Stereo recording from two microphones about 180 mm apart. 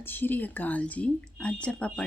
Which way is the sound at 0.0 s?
10° left (ahead or behind).